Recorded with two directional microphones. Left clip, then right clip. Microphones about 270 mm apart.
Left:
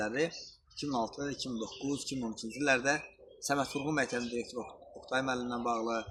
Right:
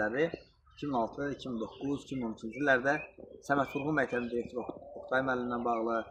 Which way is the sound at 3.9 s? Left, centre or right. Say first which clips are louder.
Right 2 dB; left.